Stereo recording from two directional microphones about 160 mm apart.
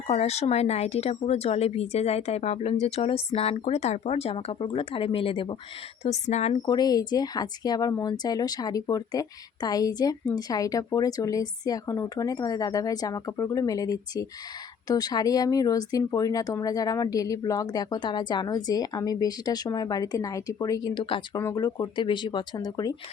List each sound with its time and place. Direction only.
0.1 s speech: 40° left (ahead or behind)
6.0 s speech: 45° left (ahead or behind)
6.6 s speech: 25° left (ahead or behind)